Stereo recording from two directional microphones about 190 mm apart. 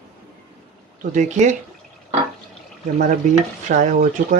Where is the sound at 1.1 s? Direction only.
40° right (ahead or behind).